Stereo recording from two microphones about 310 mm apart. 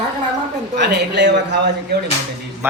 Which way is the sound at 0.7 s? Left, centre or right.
Right.